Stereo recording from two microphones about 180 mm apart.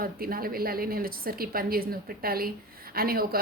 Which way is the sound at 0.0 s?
55° right (ahead or behind).